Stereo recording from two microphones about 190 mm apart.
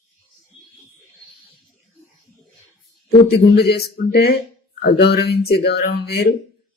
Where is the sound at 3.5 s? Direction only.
55° left (ahead or behind).